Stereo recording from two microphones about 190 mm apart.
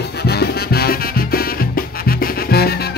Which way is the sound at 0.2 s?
55° left (ahead or behind).